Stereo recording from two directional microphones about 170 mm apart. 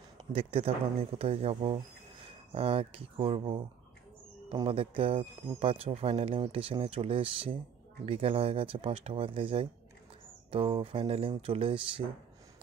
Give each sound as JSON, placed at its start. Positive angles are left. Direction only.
{"t": 0.3, "sound": "speech", "side_deg": -35}